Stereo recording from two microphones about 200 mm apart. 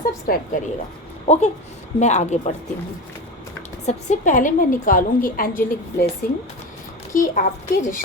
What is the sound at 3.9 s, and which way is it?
A woman's voice, 40° left (ahead or behind).